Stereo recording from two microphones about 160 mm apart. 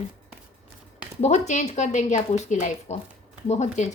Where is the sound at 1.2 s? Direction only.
45° left (ahead or behind).